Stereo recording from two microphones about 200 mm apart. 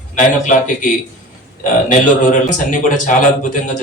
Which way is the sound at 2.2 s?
40° left (ahead or behind).